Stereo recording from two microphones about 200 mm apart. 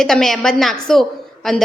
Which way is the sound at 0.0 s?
Centre (ahead or behind).